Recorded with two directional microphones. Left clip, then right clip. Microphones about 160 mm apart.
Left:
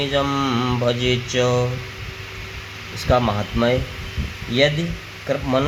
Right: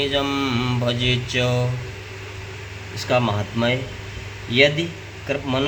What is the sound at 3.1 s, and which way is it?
Speech, 50° left (ahead or behind).